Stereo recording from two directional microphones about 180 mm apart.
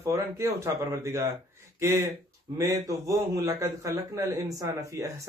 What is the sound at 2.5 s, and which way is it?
A man's voice, 15° right (ahead or behind).